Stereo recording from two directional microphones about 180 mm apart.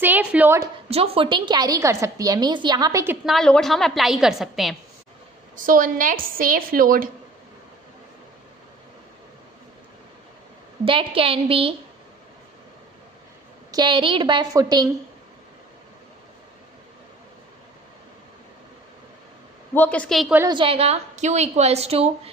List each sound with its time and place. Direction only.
0.0 s a woman's voice: 10° right (ahead or behind)
0.8 s a woman's voice: 35° right (ahead or behind); by 3.2 s 15° right (ahead or behind)
3.3 s a woman's voice: 5° left (ahead or behind)
5.6 s a woman's voice: 50° right (ahead or behind)
10.9 s a woman's voice: 30° right (ahead or behind)
13.7 s a woman's voice: 25° right (ahead or behind)
19.7 s a woman's voice: 10° left (ahead or behind)
20.3 s a woman's voice: 25° right (ahead or behind)